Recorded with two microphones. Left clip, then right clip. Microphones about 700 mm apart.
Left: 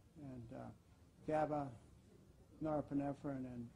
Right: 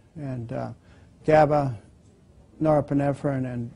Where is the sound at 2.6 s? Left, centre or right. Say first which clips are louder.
Right 19 dB; right.